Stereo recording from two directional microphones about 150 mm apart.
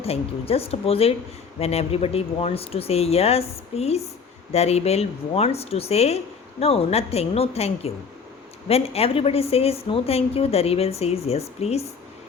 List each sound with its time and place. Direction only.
0.0 s a woman's voice: 40° left (ahead or behind)